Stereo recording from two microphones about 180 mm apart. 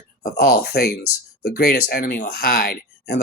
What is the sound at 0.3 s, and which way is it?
Speech, 60° left (ahead or behind).